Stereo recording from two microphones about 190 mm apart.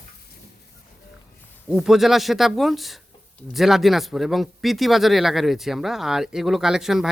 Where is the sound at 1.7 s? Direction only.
Centre (ahead or behind).